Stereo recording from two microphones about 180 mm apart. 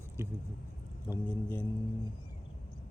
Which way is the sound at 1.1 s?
10° left (ahead or behind).